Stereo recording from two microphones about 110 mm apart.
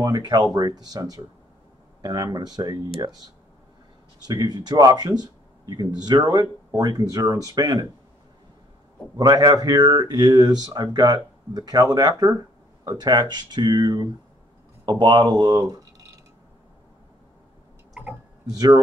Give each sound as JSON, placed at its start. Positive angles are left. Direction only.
{"t": 0.0, "sound": "speech", "side_deg": -35}
{"t": 2.0, "sound": "a sound", "side_deg": -40}
{"t": 2.3, "sound": "speech", "side_deg": -35}
{"t": 4.3, "sound": "speech", "side_deg": -35}
{"t": 9.1, "sound": "speech", "side_deg": -35}
{"t": 18.0, "sound": "tick-tock", "side_deg": -15}
{"t": 18.5, "sound": "speech", "side_deg": -35}